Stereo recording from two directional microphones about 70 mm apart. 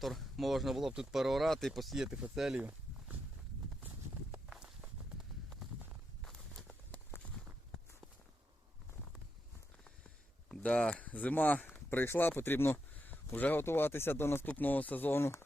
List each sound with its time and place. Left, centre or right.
0.0 s speech: centre
4.4 s walk: centre
7.1 s a sound: left
10.5 s speech: centre
11.9 s speech: left